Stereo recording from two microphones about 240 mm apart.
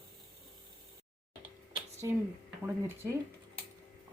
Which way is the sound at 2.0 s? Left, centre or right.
Centre.